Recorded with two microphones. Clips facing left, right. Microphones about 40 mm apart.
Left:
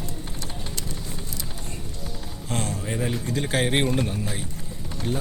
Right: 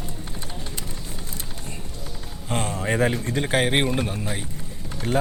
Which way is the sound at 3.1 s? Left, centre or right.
Right.